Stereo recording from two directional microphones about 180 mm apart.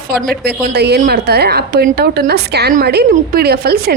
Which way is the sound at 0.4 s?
65° right (ahead or behind).